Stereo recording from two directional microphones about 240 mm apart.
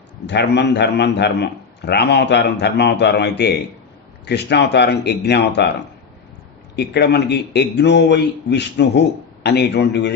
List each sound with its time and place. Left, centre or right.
0.3 s a man's voice: left
6.7 s a man's voice: left